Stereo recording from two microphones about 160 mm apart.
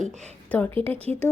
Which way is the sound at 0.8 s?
35° right (ahead or behind).